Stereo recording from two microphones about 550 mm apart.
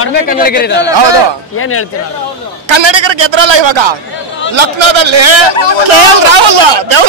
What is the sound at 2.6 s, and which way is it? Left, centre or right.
A man's voice, right.